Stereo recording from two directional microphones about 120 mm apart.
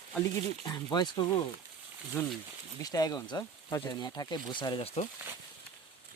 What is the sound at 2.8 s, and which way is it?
Speech, 30° left (ahead or behind).